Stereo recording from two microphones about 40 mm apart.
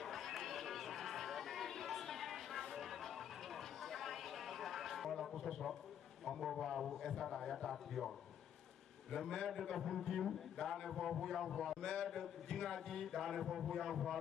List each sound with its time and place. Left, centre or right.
0.0 s a sound: centre
2.7 s music: centre
6.4 s a man's voice: centre
9.1 s a man's voice: centre